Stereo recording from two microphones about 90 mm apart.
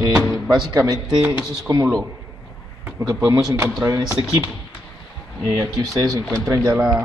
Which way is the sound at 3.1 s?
40° right (ahead or behind).